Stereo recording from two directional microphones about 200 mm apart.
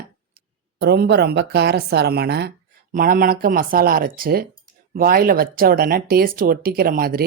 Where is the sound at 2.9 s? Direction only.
45° right (ahead or behind).